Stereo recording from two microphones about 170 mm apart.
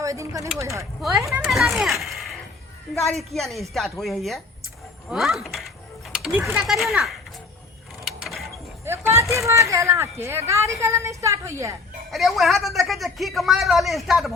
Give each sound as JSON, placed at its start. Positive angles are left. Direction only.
{"t": 0.0, "sound": "a woman's voice", "side_deg": -20}
{"t": 1.5, "sound": "a man's voice", "side_deg": 0}
{"t": 8.0, "sound": "mechanisms", "side_deg": 0}
{"t": 8.8, "sound": "a sound", "side_deg": -15}
{"t": 9.3, "sound": "a woman's voice", "side_deg": -15}
{"t": 12.1, "sound": "a man's voice", "side_deg": 0}